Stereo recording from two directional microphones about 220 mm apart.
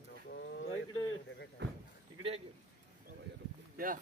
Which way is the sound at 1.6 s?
50° right (ahead or behind).